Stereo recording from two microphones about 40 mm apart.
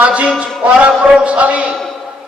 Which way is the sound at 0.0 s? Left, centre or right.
Right.